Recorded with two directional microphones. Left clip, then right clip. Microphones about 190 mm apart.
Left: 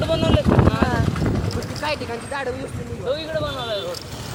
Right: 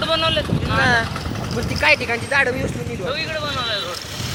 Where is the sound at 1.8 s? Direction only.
10° right (ahead or behind).